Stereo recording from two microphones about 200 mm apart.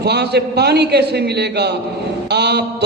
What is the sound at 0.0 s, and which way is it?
A man's voice, 55° right (ahead or behind).